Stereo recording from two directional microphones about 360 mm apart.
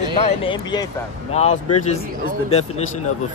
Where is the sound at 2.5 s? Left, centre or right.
Centre.